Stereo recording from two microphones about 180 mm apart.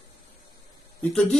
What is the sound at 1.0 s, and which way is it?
Speech, 10° left (ahead or behind).